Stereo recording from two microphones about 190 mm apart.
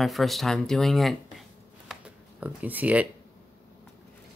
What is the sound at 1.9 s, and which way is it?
Shuffling cards, 5° right (ahead or behind).